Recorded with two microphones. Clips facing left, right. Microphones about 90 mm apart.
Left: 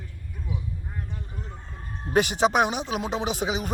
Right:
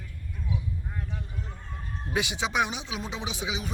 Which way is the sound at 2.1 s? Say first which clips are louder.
Left 7 dB; 45° left (ahead or behind).